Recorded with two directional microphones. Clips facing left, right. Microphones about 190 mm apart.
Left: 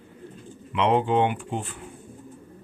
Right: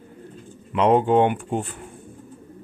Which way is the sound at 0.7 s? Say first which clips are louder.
Right 4 dB; 45° right (ahead or behind).